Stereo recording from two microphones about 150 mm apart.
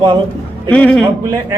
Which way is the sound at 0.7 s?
5° left (ahead or behind).